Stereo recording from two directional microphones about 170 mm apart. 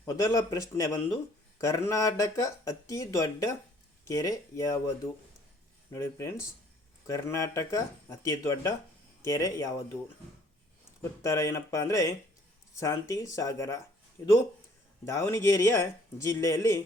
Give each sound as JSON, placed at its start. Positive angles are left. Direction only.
{"t": 0.0, "sound": "speech", "side_deg": 20}
{"t": 5.9, "sound": "speech", "side_deg": 15}
{"t": 11.2, "sound": "speech", "side_deg": 15}